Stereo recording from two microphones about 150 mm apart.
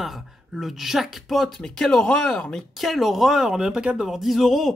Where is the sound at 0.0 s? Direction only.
Centre (ahead or behind).